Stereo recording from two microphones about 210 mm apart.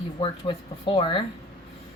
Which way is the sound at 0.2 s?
25° left (ahead or behind).